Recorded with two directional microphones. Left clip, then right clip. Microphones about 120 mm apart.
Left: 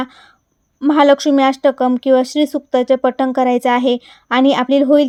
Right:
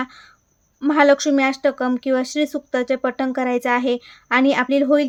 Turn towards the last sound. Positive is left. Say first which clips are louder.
# left 5 dB
turn(degrees=40)  # may be behind; listen again after turning